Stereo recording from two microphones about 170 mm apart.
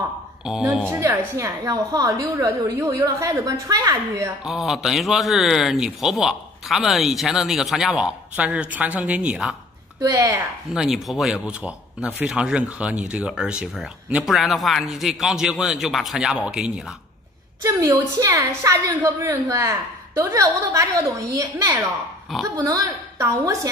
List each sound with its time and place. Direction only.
0.5 s speech: centre (ahead or behind)
0.8 s a woman's voice: 15° right (ahead or behind)
4.5 s speech: centre (ahead or behind)
9.9 s a woman's voice: 20° right (ahead or behind)
10.7 s speech: 5° right (ahead or behind)
17.6 s a woman's voice: 15° right (ahead or behind)